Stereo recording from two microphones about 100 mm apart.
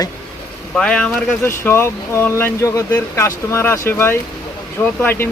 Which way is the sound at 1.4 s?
25° left (ahead or behind).